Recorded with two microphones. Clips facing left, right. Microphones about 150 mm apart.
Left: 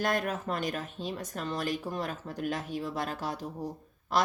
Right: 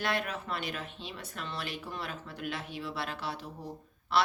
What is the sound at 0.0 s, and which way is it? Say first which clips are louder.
Speech: left 4 dB; 45° left (ahead or behind).